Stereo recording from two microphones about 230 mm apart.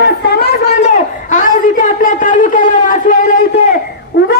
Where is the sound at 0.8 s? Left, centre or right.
Left.